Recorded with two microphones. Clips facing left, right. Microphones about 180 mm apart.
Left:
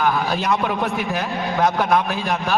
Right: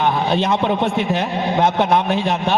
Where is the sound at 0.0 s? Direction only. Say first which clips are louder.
Right 3 dB; 25° right (ahead or behind).